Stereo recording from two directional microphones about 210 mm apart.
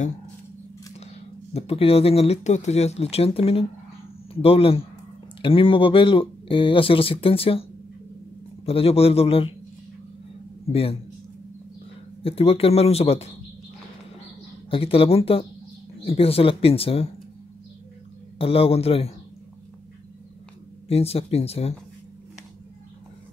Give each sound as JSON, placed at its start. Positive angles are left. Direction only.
{"t": 1.5, "sound": "speech", "side_deg": 25}
{"t": 8.6, "sound": "speech", "side_deg": 30}
{"t": 10.7, "sound": "speech", "side_deg": 25}
{"t": 12.2, "sound": "speech", "side_deg": 25}
{"t": 14.7, "sound": "speech", "side_deg": 25}
{"t": 18.4, "sound": "speech", "side_deg": 25}
{"t": 20.9, "sound": "speech", "side_deg": 30}